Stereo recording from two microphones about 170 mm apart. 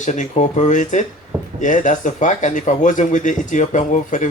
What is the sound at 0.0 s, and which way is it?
Speech, 45° left (ahead or behind).